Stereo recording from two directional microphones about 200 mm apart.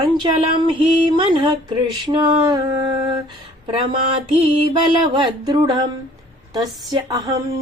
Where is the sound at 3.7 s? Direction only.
25° right (ahead or behind).